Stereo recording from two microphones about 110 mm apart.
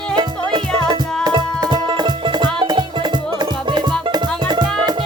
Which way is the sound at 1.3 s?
40° right (ahead or behind).